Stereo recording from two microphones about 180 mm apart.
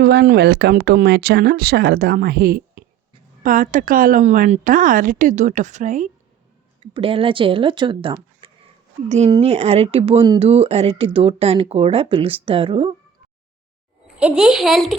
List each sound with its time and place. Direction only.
0.0 s a woman's voice: 70° right (ahead or behind); by 6.1 s 45° right (ahead or behind)
6.7 s speech: 30° right (ahead or behind)
9.0 s speech: 40° right (ahead or behind)
14.2 s speech: 5° right (ahead or behind)